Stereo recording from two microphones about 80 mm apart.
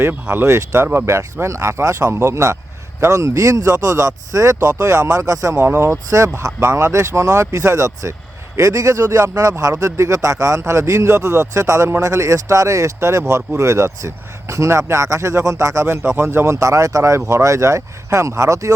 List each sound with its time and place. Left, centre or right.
0.0 s speech: right
5.5 s speech: right
6.1 s speech: right